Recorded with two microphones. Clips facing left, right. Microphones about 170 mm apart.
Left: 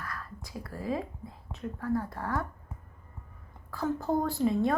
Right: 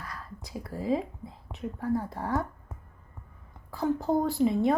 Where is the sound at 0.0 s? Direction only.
20° right (ahead or behind).